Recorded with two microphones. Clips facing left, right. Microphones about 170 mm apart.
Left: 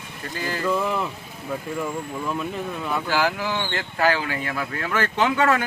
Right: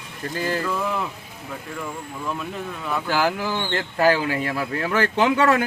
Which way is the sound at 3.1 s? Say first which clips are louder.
Right 1 dB; 45° right (ahead or behind).